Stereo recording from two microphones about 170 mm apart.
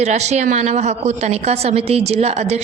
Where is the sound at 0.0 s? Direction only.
40° right (ahead or behind).